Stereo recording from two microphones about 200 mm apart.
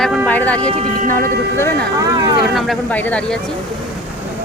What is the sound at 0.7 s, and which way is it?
Speech, 40° right (ahead or behind).